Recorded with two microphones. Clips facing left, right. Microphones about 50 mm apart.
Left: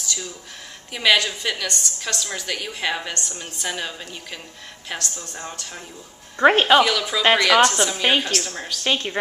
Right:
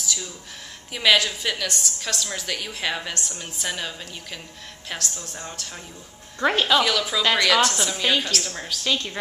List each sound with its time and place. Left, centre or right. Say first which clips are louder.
0.0 s a sound: even; centre
0.9 s a woman's voice: left 1 dB; centre
6.4 s speech: left 6 dB; left
6.8 s a woman's voice: left 3 dB; centre
7.3 s a woman's voice: left 3 dB; centre
7.6 s a woman's voice: left 4 dB; centre
8.8 s a woman's voice: left 3 dB; left